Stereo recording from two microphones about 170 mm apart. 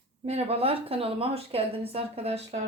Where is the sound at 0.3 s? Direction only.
35° right (ahead or behind).